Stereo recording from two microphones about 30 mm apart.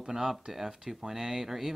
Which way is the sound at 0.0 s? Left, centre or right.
Centre.